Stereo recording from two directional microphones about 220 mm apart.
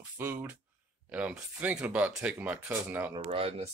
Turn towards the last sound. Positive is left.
turn(degrees=-30)  # may be behind; listen again after turning